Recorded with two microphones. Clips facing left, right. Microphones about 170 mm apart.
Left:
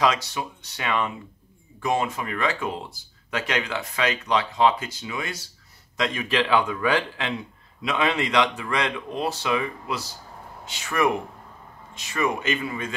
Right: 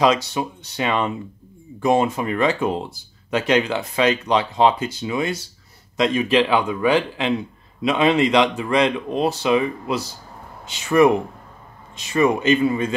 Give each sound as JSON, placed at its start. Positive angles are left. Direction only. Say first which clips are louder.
{"t": 0.0, "sound": "speech", "louder": "right 5 dB", "side_deg": -25}